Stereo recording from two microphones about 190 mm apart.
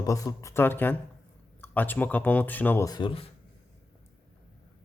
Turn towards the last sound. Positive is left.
turn(degrees=25)  # may be behind; listen again after turning